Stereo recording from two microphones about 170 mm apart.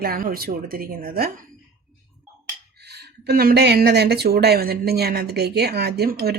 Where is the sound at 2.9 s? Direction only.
70° right (ahead or behind).